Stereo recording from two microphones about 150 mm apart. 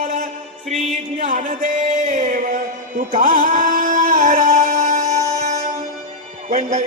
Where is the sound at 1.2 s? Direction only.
60° right (ahead or behind).